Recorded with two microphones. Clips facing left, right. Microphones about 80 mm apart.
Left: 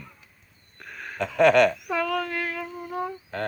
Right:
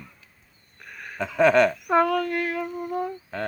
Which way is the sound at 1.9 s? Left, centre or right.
Right.